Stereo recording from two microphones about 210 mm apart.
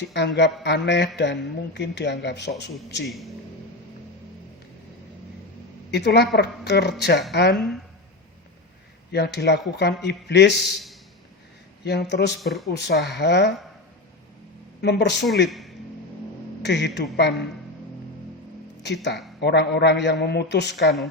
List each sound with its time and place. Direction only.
0.1 s speech: 55° left (ahead or behind)
5.9 s a man's voice: 50° left (ahead or behind)
7.5 s speech: centre (ahead or behind)
9.1 s a man's voice: 50° left (ahead or behind)
11.9 s a man's voice: 55° left (ahead or behind)
12.4 s speech: centre (ahead or behind)
12.6 s a man's voice: 50° left (ahead or behind)
14.8 s a man's voice: 55° left (ahead or behind)
16.6 s a man's voice: 55° left (ahead or behind)
18.8 s a woman's voice: 55° left (ahead or behind)